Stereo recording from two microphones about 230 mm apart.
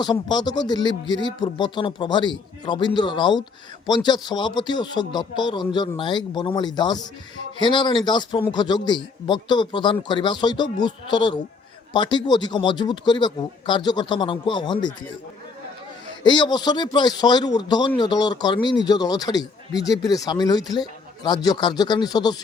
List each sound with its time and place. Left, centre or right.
0.0 s a man's voice: centre
16.2 s a man's voice: centre